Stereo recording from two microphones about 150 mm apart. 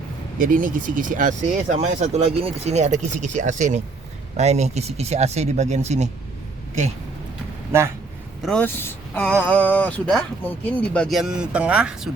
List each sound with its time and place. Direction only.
0.3 s speech: 65° right (ahead or behind)
1.7 s speech: 45° right (ahead or behind)
8.4 s speech: centre (ahead or behind)
8.6 s speech: 15° left (ahead or behind); by 12.1 s 5° right (ahead or behind)